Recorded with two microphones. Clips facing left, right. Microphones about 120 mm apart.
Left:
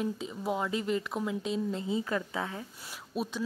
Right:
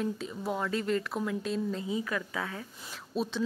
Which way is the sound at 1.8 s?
30° left (ahead or behind).